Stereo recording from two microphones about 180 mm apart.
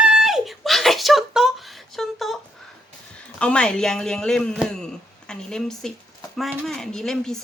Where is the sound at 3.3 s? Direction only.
5° left (ahead or behind).